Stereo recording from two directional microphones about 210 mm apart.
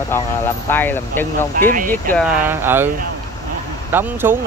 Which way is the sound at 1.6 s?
40° right (ahead or behind).